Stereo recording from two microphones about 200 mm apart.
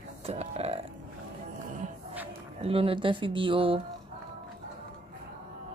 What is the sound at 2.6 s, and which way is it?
Speech, 25° right (ahead or behind).